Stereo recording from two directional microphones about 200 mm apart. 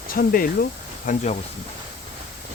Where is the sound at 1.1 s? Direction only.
35° left (ahead or behind).